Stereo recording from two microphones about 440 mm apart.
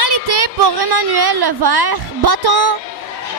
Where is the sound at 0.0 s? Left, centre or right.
Right.